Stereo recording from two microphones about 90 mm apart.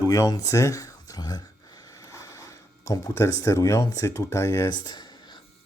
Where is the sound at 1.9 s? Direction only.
35° left (ahead or behind).